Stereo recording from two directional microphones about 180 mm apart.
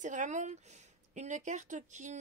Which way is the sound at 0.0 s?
45° right (ahead or behind).